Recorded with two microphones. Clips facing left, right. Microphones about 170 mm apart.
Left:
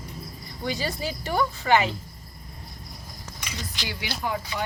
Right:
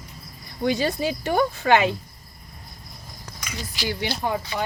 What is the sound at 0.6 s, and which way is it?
Speech, 55° right (ahead or behind).